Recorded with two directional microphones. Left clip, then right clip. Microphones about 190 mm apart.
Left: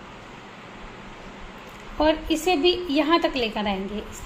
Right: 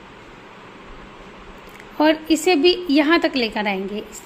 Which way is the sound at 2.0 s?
35° right (ahead or behind).